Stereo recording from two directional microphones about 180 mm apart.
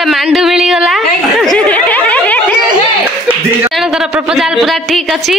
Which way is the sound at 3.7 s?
5° right (ahead or behind).